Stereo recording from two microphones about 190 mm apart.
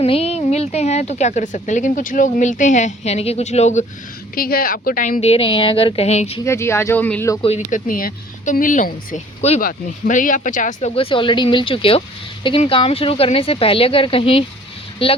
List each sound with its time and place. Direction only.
0.0 s speech: 30° left (ahead or behind)
4.4 s speech: 50° left (ahead or behind); by 6.4 s 35° left (ahead or behind)
6.4 s speech: 15° left (ahead or behind)
7.4 s speech: 40° left (ahead or behind)